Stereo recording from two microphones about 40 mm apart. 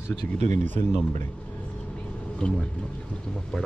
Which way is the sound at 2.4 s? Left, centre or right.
Left.